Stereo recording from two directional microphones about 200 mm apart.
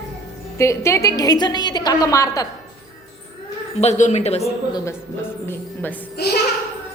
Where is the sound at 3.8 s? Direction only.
35° left (ahead or behind).